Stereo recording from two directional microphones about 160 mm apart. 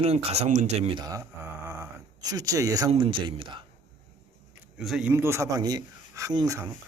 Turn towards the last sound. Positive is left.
turn(degrees=-20)  # may be behind; listen again after turning